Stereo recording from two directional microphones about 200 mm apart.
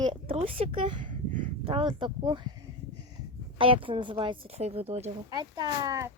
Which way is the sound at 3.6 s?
25° right (ahead or behind).